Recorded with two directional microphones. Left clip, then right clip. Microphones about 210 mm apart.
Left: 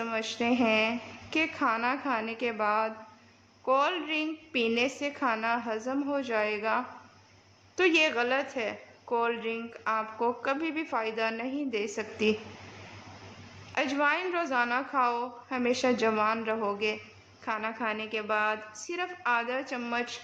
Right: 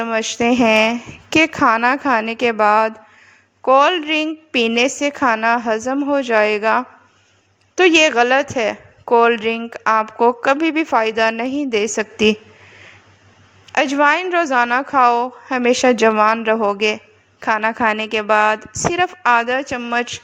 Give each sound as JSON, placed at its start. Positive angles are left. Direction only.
{"t": 0.0, "sound": "a woman's voice", "side_deg": -40}
{"t": 13.7, "sound": "a woman's voice", "side_deg": -40}